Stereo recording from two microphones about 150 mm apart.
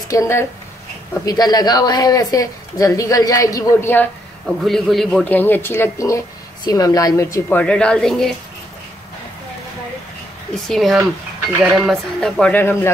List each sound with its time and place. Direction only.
0.1 s speech: 20° left (ahead or behind)
4.6 s speech: centre (ahead or behind)
10.5 s speech: centre (ahead or behind)